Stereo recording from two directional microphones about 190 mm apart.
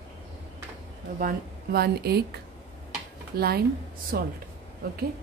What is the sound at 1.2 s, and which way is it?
A woman's voice, 55° right (ahead or behind).